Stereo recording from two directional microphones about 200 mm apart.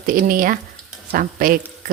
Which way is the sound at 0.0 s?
45° right (ahead or behind).